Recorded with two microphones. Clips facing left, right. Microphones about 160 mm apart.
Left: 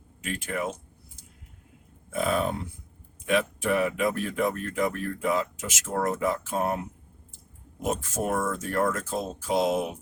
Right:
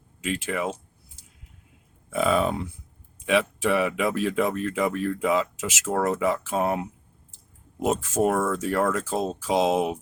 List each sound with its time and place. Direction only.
0.3 s speech: 90° right
2.1 s speech: 90° right
5.8 s speech: 70° right (ahead or behind)
7.9 s speech: 75° right (ahead or behind)
9.5 s a sound: 80° right